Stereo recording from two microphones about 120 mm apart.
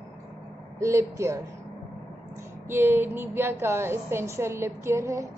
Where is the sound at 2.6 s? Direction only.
20° right (ahead or behind).